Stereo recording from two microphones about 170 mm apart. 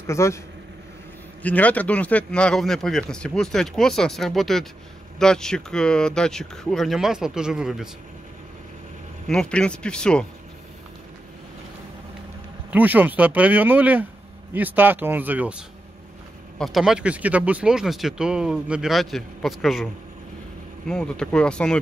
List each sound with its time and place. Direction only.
0.0 s speech: 15° left (ahead or behind)
1.4 s speech: 10° left (ahead or behind)
9.3 s speech: 5° left (ahead or behind)
12.7 s speech: 10° right (ahead or behind)
16.5 s speech: centre (ahead or behind)